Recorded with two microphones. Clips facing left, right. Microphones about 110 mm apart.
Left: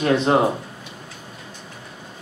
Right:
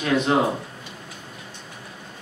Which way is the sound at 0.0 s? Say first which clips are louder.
Left 3 dB; 30° left (ahead or behind).